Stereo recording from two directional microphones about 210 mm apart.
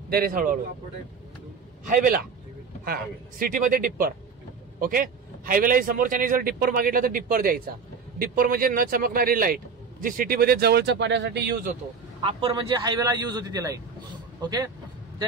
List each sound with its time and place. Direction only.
0.1 s speech: 45° right (ahead or behind)
1.9 s a man's voice: 45° right (ahead or behind)
12.2 s a man's voice: 25° right (ahead or behind)